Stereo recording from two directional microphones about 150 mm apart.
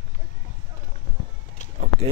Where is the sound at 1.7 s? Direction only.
50° right (ahead or behind).